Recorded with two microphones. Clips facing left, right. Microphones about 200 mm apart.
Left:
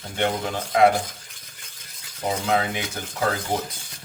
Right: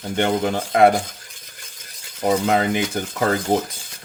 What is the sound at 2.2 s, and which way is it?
Speech, 55° right (ahead or behind).